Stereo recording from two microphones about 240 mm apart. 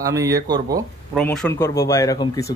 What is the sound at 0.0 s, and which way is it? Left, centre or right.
Speech, centre.